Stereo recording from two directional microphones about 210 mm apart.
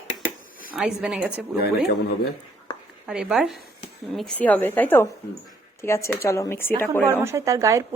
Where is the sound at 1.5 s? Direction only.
50° left (ahead or behind).